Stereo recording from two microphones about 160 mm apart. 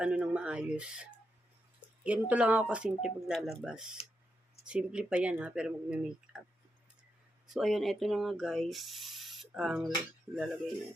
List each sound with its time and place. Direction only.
0.0 s speech: 5° right (ahead or behind)
2.0 s speech: 10° right (ahead or behind)
7.4 s speech: centre (ahead or behind)